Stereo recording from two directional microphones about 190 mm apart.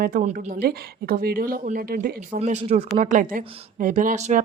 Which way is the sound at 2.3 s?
35° right (ahead or behind).